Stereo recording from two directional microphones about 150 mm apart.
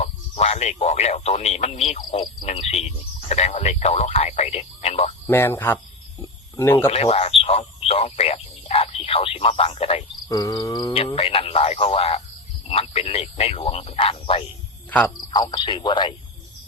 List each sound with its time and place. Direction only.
0.0 s speech: 45° left (ahead or behind)
5.2 s speech: 15° left (ahead or behind)
6.2 s cricket: 15° left (ahead or behind)
6.8 s speech: 40° left (ahead or behind)
10.2 s cricket: 25° left (ahead or behind)
10.9 s speech: 40° left (ahead or behind)
14.8 s cricket: 10° left (ahead or behind)
15.3 s speech: 30° left (ahead or behind)